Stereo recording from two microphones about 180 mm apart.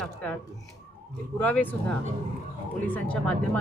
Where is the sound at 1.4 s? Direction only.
10° left (ahead or behind).